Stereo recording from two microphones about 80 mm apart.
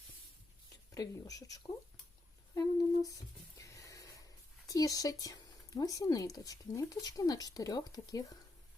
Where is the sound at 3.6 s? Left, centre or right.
Left.